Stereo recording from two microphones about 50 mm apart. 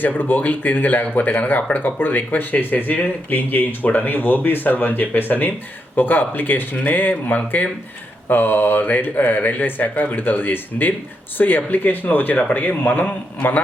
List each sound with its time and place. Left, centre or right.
0.0 s speech: left